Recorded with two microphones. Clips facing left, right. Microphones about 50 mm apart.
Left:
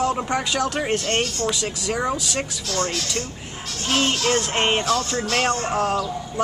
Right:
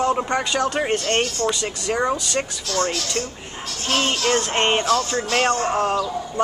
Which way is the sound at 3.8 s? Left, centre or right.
Centre.